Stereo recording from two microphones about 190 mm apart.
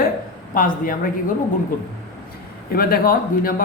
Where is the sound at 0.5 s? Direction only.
45° left (ahead or behind).